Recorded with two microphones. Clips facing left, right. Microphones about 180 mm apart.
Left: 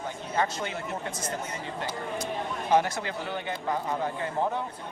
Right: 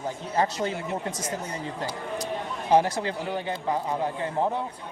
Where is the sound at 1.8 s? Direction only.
35° right (ahead or behind).